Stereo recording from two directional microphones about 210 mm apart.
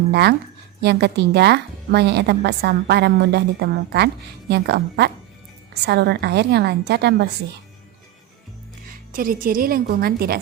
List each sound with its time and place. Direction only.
0.1 s speech: 50° right (ahead or behind)
9.1 s speech: 40° right (ahead or behind)